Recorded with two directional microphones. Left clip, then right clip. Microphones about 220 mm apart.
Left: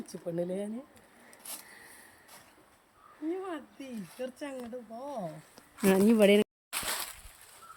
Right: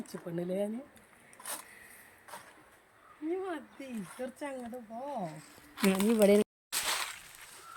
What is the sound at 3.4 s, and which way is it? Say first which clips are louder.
Speech: even; 10° left (ahead or behind).